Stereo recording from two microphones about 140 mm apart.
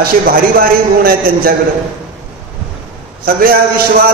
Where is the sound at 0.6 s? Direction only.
90° right.